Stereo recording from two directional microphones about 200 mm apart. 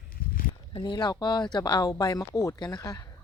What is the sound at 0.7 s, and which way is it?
Speech, 20° left (ahead or behind).